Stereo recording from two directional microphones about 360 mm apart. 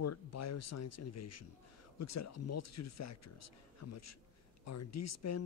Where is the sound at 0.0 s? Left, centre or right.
Left.